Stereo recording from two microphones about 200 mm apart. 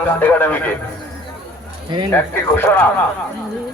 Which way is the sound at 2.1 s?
10° left (ahead or behind).